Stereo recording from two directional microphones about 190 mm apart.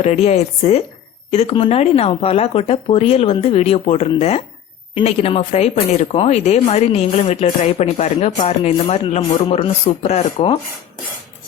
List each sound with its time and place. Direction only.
0.0 s speech: 35° left (ahead or behind)